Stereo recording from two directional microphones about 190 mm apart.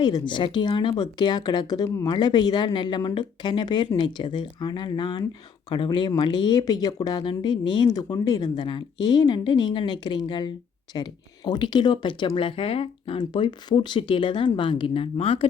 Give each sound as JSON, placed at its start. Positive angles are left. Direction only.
{"t": 0.0, "sound": "speech", "side_deg": 25}